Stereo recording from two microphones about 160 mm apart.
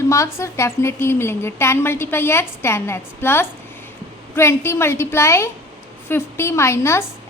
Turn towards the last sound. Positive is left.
turn(degrees=15)  # may be behind; listen again after turning